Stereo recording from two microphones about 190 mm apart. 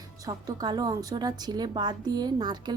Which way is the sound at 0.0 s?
20° right (ahead or behind).